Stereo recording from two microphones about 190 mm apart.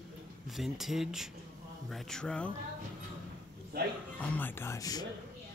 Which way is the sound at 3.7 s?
55° right (ahead or behind).